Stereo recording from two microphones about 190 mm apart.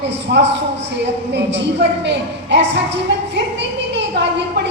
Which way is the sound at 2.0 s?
65° right (ahead or behind).